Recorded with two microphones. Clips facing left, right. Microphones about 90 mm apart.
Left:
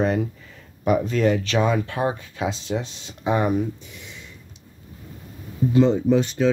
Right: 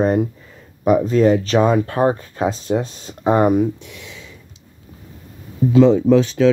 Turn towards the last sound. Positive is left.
turn(degrees=-90)